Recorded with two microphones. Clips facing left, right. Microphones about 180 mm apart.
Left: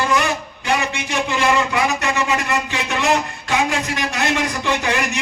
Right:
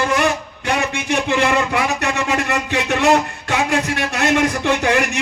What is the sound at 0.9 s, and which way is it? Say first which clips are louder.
A man's voice: right 4 dB; 55° right (ahead or behind).